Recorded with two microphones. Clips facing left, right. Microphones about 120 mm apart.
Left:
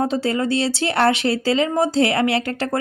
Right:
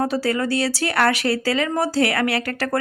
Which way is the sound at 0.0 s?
25° left (ahead or behind).